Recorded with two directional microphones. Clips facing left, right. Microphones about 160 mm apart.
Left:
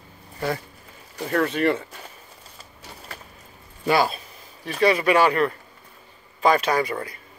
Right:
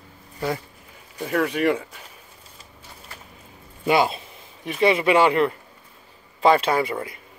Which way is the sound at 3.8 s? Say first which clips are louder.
Right 1 dB; 20° right (ahead or behind).